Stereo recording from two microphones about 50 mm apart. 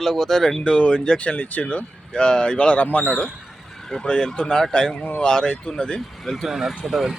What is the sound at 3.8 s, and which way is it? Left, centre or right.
Speech, centre.